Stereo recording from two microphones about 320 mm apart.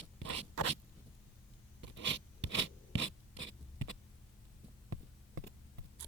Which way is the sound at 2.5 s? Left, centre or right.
Right.